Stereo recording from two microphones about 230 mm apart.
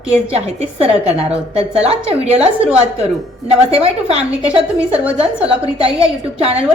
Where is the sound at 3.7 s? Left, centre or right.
Right.